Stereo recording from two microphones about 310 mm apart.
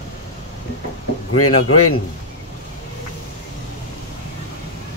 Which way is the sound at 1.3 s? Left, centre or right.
Left.